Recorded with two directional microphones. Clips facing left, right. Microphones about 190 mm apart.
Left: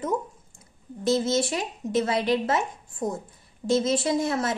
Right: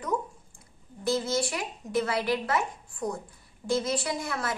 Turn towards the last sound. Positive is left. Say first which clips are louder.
# left 7 dB
turn(degrees=25)  # may be behind; listen again after turning